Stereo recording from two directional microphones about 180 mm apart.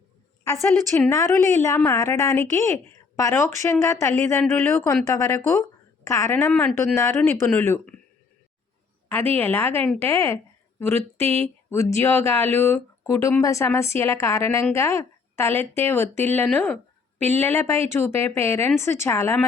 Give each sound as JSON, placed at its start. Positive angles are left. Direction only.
{"t": 0.4, "sound": "speech", "side_deg": 15}
{"t": 9.3, "sound": "a woman's voice", "side_deg": 10}
{"t": 11.3, "sound": "speech", "side_deg": -35}
{"t": 11.7, "sound": "speech", "side_deg": 15}